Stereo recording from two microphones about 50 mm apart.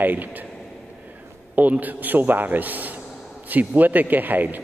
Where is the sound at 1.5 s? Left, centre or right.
Right.